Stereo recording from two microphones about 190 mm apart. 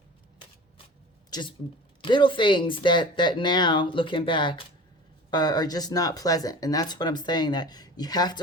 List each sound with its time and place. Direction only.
1.3 s speech: 25° left (ahead or behind)